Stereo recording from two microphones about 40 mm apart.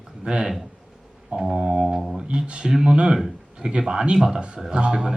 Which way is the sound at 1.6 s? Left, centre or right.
Right.